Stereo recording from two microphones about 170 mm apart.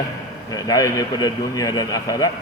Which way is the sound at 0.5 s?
20° left (ahead or behind).